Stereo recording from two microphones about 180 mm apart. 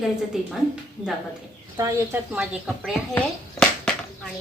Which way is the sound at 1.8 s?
20° right (ahead or behind).